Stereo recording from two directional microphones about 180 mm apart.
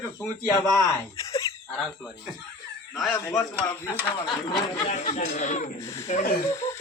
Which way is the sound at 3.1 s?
10° left (ahead or behind).